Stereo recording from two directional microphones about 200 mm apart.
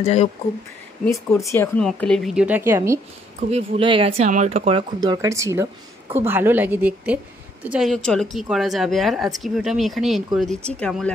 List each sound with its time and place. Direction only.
0.0 s speech: 30° left (ahead or behind)
1.0 s speech: 10° left (ahead or behind); by 3.0 s 15° right (ahead or behind)
3.3 s a woman's voice: 30° right (ahead or behind); by 11.1 s 5° left (ahead or behind)